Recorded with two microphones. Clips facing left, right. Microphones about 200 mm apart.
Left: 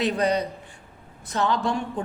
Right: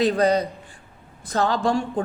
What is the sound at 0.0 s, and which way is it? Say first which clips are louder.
A woman's voice: right 4 dB; 40° right (ahead or behind).